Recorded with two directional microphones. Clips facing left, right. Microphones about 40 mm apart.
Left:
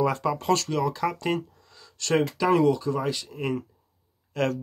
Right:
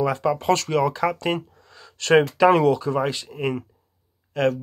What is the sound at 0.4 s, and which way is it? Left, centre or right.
Speech, right.